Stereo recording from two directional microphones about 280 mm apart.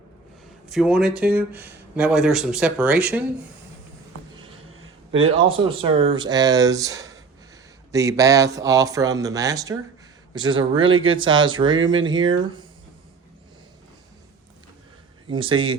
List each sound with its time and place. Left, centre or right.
0.7 s speech: centre
4.7 s a sound: right
5.3 s speech: centre
15.3 s speech: centre